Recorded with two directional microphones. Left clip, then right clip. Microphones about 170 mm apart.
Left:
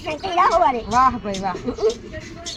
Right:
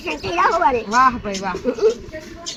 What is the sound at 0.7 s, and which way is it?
Speech, 10° left (ahead or behind).